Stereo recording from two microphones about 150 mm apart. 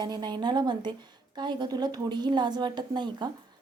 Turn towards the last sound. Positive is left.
turn(degrees=-30)  # may be behind; listen again after turning